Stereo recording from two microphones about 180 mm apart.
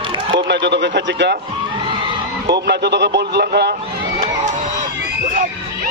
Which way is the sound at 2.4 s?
70° right (ahead or behind).